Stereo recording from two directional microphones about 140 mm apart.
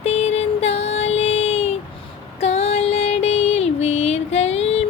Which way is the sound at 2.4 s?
50° left (ahead or behind).